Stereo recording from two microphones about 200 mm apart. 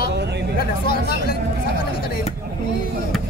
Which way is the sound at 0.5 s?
50° left (ahead or behind).